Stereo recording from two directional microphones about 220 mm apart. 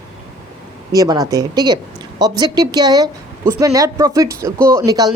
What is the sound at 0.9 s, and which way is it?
Speech, 15° right (ahead or behind).